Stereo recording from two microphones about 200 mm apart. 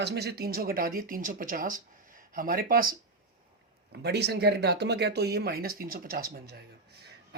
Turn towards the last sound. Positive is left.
turn(degrees=-50)  # may be behind; listen again after turning